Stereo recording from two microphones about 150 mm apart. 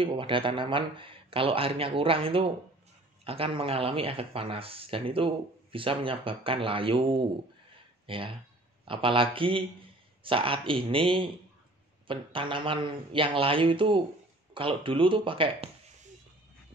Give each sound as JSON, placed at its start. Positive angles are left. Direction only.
{"t": 0.0, "sound": "speech", "side_deg": -35}